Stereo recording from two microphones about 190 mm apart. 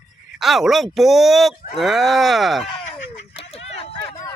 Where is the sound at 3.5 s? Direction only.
30° left (ahead or behind).